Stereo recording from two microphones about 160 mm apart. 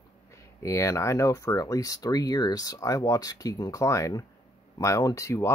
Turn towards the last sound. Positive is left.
turn(degrees=20)  # may be behind; listen again after turning